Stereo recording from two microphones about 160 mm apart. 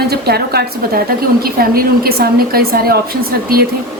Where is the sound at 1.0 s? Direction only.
70° right (ahead or behind).